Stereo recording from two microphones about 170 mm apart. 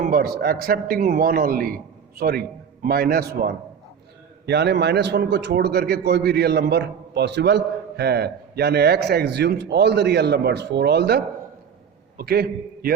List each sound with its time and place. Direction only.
0.0 s a man's voice: 60° right (ahead or behind)
4.4 s a man's voice: 85° right
12.1 s a man's voice: 65° right (ahead or behind)